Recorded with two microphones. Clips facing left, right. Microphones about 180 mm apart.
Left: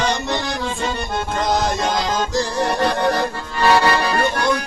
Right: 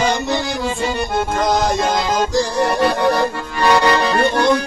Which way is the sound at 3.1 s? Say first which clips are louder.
Right 3 dB; 15° right (ahead or behind).